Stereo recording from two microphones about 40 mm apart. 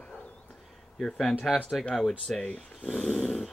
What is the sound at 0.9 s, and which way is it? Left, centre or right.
Speech, centre.